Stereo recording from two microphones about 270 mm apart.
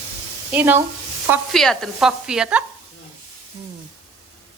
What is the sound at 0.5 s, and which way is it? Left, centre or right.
A woman's voice, centre.